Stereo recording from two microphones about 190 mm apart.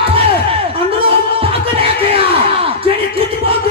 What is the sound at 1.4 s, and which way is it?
Music, 30° right (ahead or behind).